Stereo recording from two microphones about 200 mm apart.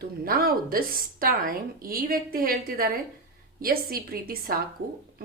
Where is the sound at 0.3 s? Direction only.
45° right (ahead or behind).